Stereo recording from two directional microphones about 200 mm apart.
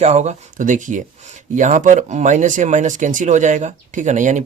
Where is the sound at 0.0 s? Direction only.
35° right (ahead or behind).